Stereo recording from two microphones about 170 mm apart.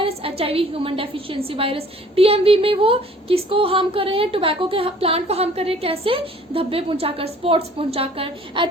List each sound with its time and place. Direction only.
0.0 s a woman's voice: 35° right (ahead or behind)